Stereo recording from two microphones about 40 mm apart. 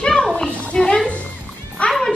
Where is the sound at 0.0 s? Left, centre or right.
Left.